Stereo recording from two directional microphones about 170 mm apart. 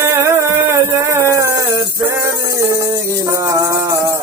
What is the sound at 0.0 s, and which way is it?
Music, 15° right (ahead or behind).